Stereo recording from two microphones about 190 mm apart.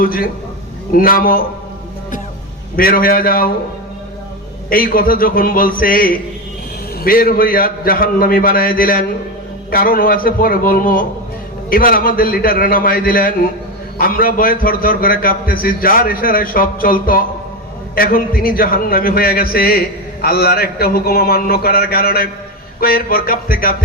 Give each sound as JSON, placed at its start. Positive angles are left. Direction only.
{"t": 0.0, "sound": "a man's voice", "side_deg": 50}
{"t": 2.7, "sound": "a man's voice", "side_deg": 50}
{"t": 4.7, "sound": "a man's voice", "side_deg": 50}